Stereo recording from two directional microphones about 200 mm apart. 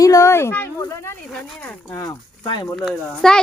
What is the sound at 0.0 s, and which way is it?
Speech, 15° left (ahead or behind).